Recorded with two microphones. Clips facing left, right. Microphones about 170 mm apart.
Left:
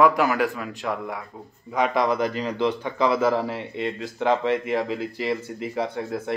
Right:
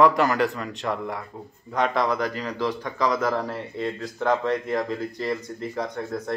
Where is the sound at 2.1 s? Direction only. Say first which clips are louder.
Left 3 dB; 20° left (ahead or behind).